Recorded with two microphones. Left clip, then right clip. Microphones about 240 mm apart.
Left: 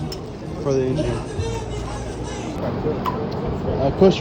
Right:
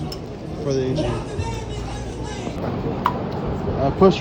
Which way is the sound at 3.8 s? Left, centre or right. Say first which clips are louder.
Even; centre.